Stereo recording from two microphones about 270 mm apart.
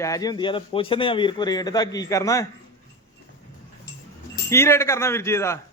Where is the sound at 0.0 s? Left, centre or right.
Centre.